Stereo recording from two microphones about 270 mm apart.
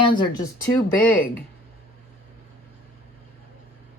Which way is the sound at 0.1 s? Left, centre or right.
Centre.